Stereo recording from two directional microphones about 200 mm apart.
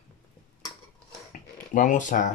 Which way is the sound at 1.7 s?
40° left (ahead or behind).